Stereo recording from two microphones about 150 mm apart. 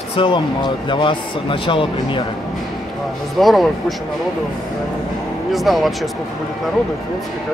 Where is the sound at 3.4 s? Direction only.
Centre (ahead or behind).